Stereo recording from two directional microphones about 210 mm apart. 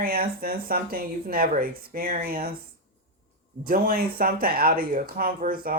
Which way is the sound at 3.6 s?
45° right (ahead or behind).